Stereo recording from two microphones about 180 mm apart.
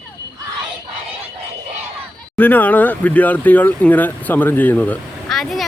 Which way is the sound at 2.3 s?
10° left (ahead or behind).